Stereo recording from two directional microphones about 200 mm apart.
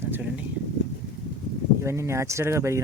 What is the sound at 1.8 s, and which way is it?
Speech, 15° right (ahead or behind).